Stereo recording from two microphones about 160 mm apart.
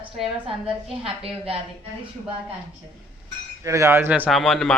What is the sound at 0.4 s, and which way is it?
A woman's voice, 35° right (ahead or behind).